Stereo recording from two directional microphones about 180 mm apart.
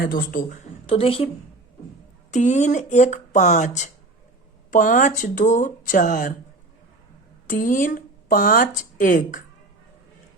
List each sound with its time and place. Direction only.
0.0 s speech: 55° left (ahead or behind); by 1.3 s 30° left (ahead or behind)
2.3 s speech: 40° left (ahead or behind)
7.4 s speech: 50° left (ahead or behind)